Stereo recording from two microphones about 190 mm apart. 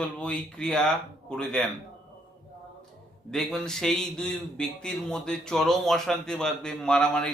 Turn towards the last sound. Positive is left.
turn(degrees=5)  # may be behind; listen again after turning